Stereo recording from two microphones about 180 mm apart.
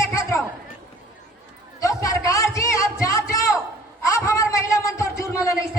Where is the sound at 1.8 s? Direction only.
20° left (ahead or behind).